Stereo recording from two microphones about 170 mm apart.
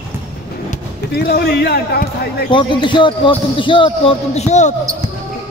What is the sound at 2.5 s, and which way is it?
Speech, 30° left (ahead or behind).